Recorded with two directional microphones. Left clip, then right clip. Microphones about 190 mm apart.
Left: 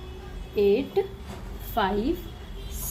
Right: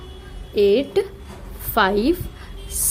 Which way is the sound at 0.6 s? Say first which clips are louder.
Right 6 dB; 55° right (ahead or behind).